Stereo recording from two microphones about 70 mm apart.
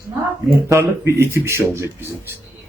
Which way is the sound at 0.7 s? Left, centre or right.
Right.